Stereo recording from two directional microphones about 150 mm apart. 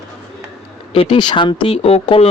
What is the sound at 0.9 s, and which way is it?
A man's voice, 40° left (ahead or behind).